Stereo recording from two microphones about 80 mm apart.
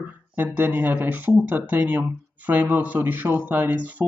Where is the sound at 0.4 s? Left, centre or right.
Right.